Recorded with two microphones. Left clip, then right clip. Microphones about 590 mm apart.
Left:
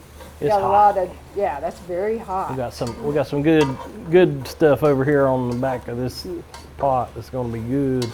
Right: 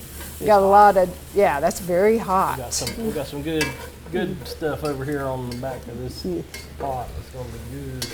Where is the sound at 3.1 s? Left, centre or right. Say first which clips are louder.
Left 9 dB; left.